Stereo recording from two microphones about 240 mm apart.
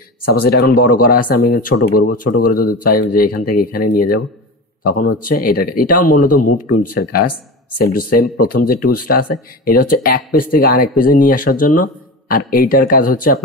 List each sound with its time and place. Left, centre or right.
0.2 s speech: left